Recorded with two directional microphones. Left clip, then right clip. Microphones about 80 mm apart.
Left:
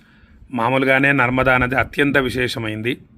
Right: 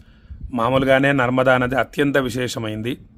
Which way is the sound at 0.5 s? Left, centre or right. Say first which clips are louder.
Even; right.